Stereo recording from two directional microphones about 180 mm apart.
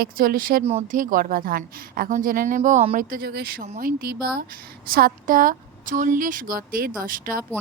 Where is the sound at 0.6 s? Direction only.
40° right (ahead or behind).